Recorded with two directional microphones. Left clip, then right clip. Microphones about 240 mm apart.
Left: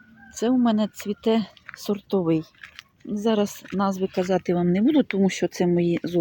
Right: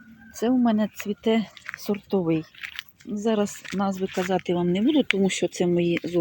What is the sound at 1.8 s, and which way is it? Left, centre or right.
Speech, centre.